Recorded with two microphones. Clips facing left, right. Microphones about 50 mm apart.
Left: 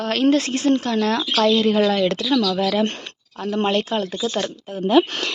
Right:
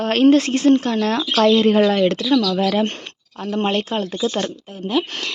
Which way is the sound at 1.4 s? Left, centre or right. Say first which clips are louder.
Right 3 dB; right.